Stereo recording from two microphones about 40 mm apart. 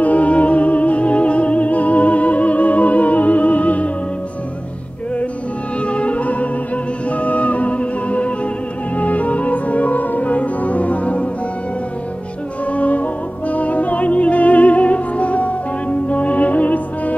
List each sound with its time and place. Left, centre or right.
0.0 s music: left
5.9 s music: left
12.7 s music: left